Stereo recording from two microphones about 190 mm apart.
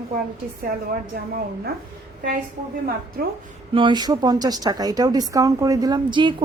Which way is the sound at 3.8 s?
25° right (ahead or behind).